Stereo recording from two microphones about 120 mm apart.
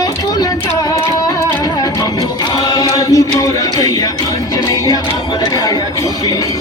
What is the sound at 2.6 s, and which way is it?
Chant, 30° left (ahead or behind).